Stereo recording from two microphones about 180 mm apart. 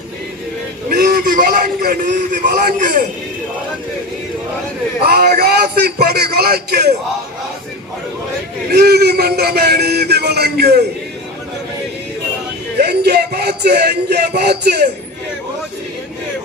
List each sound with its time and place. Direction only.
0.9 s a sound: 60° right (ahead or behind); by 3.0 s 45° right (ahead or behind)
5.0 s a man's voice: 60° right (ahead or behind)
8.7 s a man's voice: 60° right (ahead or behind)
12.8 s speech: 65° right (ahead or behind)